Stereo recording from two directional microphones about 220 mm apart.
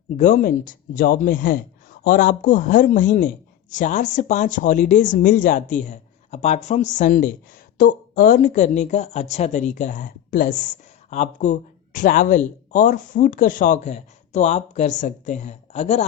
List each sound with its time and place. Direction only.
0.2 s speech: 35° left (ahead or behind)